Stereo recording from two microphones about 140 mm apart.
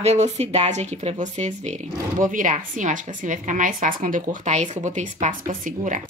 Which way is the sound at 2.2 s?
70° right (ahead or behind).